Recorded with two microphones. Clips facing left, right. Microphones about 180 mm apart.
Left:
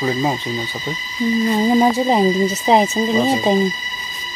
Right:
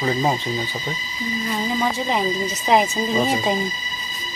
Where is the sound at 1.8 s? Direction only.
35° left (ahead or behind).